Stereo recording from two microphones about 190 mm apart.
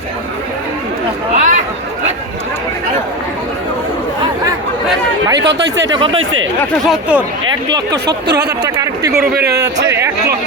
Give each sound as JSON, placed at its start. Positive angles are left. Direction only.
{"t": 1.4, "sound": "a sound", "side_deg": -40}
{"t": 5.4, "sound": "speech", "side_deg": -65}
{"t": 6.1, "sound": "speech", "side_deg": -90}
{"t": 6.8, "sound": "speech", "side_deg": -5}
{"t": 8.0, "sound": "speech", "side_deg": -60}
{"t": 8.6, "sound": "a sound", "side_deg": -15}
{"t": 9.6, "sound": "a man's voice", "side_deg": -15}